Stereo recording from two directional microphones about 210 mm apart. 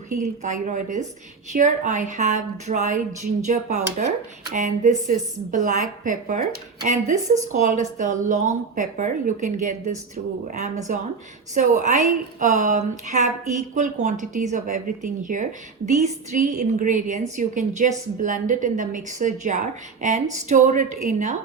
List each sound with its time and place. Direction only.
0.2 s a woman's voice: 35° right (ahead or behind)